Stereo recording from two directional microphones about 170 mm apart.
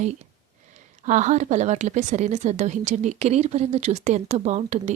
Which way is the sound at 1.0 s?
45° right (ahead or behind).